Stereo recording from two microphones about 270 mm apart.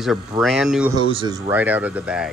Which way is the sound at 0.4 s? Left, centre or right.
Centre.